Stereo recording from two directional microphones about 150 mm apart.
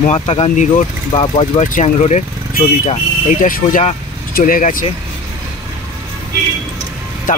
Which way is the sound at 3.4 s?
55° left (ahead or behind).